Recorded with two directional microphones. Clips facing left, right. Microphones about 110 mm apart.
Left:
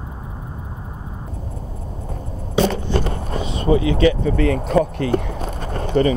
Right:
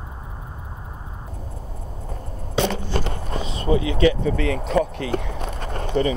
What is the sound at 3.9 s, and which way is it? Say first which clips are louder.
Speech: left 2 dB; 35° left (ahead or behind).